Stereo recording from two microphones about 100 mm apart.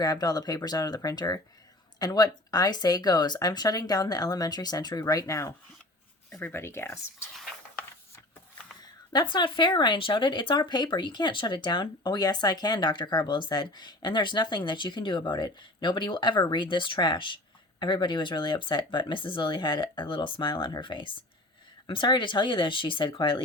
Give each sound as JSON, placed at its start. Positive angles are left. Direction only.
{"t": 0.0, "sound": "speech", "side_deg": 40}
{"t": 8.8, "sound": "speech", "side_deg": 50}